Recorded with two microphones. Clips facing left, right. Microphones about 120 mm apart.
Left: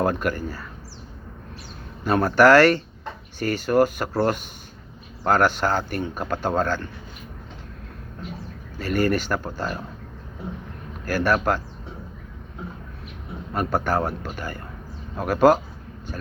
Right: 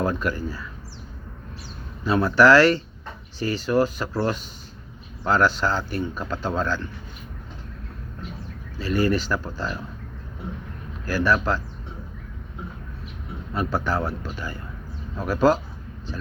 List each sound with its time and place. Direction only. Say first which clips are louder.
0.0 s speech: left 2 dB; 50° left (ahead or behind)
2.0 s speech: left 1 dB; 50° left (ahead or behind)
8.8 s speech: even; 50° left (ahead or behind)
11.0 s speech: left 1 dB; 50° left (ahead or behind)
13.5 s speech: left 2 dB; 50° left (ahead or behind)